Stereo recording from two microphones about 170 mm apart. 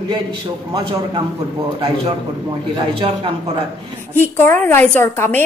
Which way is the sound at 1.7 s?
30° right (ahead or behind).